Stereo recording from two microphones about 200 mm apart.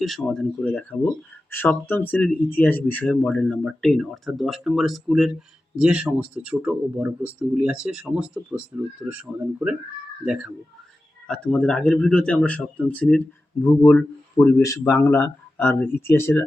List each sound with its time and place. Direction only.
0.0 s speech: centre (ahead or behind)